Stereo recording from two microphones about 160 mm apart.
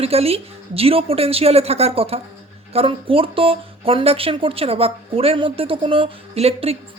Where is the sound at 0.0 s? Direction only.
40° right (ahead or behind).